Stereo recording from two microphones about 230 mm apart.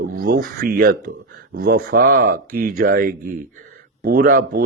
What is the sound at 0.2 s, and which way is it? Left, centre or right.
Speech, right.